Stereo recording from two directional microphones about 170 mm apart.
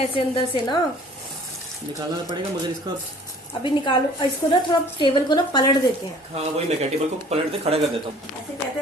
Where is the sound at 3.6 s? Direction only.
30° left (ahead or behind).